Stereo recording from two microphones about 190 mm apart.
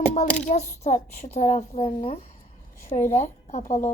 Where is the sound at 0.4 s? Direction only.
40° left (ahead or behind).